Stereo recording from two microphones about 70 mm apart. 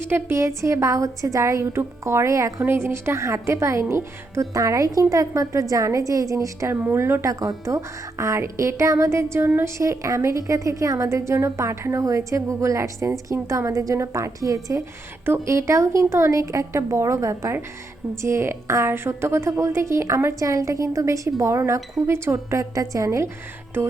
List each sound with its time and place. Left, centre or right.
0.0 s a woman's voice: right
4.5 s a woman's voice: right
6.7 s a woman's voice: right
7.3 s a woman's voice: right